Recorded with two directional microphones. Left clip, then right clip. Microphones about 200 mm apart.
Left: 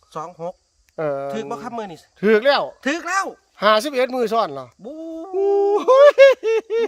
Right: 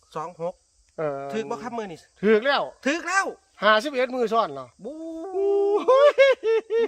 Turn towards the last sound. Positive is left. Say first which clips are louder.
# left 3 dB
turn(degrees=50)  # may be behind; listen again after turning